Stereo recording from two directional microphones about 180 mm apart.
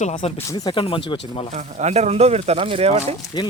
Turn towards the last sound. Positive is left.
turn(degrees=-35)  # may be behind; listen again after turning